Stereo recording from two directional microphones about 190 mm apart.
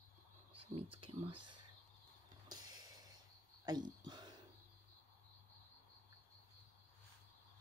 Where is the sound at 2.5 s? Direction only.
20° right (ahead or behind).